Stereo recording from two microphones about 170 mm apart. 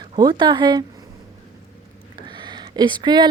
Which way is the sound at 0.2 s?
25° right (ahead or behind).